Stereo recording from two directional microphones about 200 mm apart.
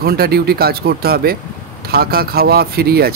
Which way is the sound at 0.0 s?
50° right (ahead or behind).